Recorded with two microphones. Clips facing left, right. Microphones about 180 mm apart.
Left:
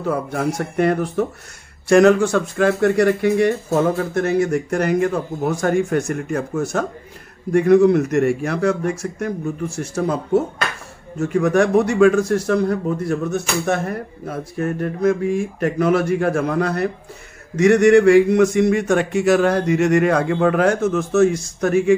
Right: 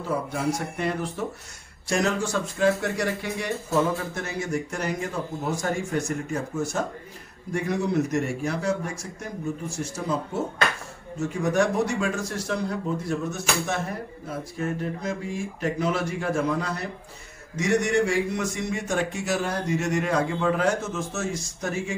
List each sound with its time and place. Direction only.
0.0 s a man's voice: 60° left (ahead or behind)